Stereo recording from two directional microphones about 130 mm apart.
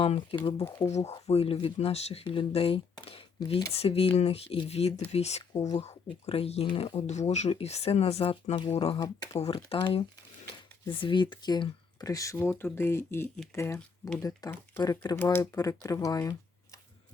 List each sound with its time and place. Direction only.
0.0 s speech: 45° left (ahead or behind)
0.5 s speech: 25° left (ahead or behind)
0.9 s speech: 60° left (ahead or behind)
1.1 s speech: 50° left (ahead or behind); by 14.5 s 25° left (ahead or behind)
14.5 s speech: 15° left (ahead or behind)
14.8 s speech: 30° left (ahead or behind)
15.2 s speech: 15° left (ahead or behind)
15.5 s speech: 25° left (ahead or behind)